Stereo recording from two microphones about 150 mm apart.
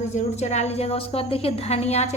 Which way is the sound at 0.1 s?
50° left (ahead or behind).